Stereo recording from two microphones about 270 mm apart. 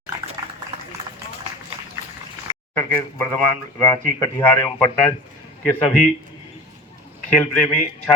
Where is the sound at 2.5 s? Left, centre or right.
Centre.